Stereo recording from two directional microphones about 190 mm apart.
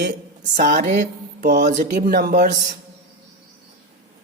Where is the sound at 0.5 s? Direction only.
45° right (ahead or behind).